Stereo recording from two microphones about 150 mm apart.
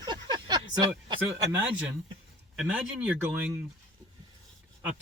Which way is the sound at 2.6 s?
10° right (ahead or behind).